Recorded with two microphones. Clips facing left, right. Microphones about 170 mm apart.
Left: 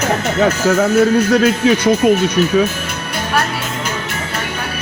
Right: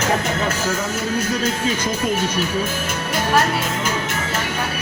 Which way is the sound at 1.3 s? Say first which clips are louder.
Left 9 dB; 70° left (ahead or behind).